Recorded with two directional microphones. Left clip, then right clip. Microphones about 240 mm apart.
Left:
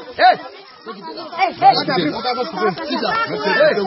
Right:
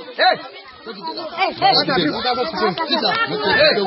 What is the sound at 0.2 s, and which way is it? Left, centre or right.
Speech, left.